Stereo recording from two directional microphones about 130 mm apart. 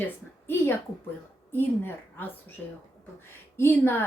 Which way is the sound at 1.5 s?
15° left (ahead or behind).